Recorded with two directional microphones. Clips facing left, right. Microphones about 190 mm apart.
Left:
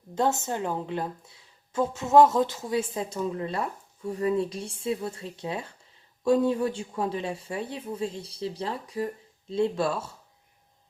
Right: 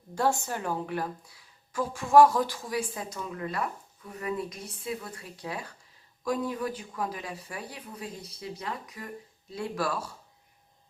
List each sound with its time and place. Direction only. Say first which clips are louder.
0.1 s speech: left 2 dB; 20° left (ahead or behind)